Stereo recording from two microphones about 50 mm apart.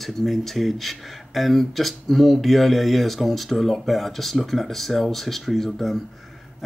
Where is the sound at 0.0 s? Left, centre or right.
Centre.